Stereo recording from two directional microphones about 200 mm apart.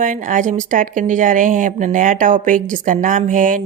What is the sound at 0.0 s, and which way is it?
Speech, 40° right (ahead or behind).